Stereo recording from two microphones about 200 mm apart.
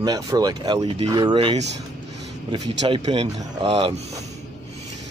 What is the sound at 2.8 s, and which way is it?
Speech, 25° right (ahead or behind).